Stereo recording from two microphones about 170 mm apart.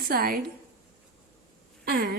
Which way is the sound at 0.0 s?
60° right (ahead or behind).